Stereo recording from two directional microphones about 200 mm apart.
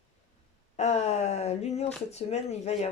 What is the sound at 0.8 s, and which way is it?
Speech, 35° left (ahead or behind).